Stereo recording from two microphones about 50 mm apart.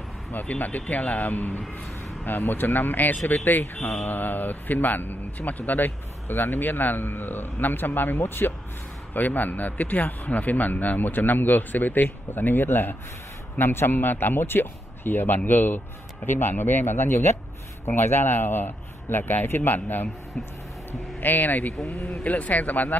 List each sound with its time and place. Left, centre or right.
0.3 s speech: left
9.1 s a man's voice: left
21.2 s speech: left
21.8 s speech: left
22.2 s speech: left